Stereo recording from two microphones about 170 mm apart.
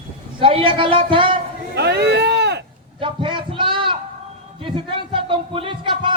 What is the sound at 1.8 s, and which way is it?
Speech, 75° right (ahead or behind).